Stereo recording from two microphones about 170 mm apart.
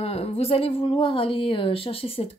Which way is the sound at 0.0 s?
35° left (ahead or behind).